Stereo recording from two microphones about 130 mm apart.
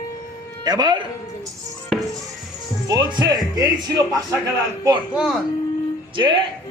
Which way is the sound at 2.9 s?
35° right (ahead or behind).